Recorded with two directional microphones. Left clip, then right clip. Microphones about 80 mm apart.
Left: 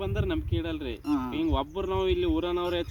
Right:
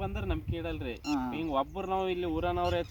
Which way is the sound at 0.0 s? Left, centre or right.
Right.